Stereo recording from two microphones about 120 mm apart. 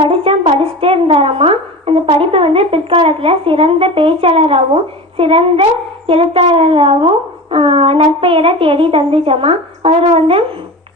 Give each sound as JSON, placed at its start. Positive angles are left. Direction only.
{"t": 0.1, "sound": "a woman's voice", "side_deg": -50}